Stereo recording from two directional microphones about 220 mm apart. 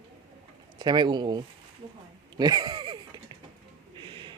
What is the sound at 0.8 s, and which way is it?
Speech, 20° right (ahead or behind).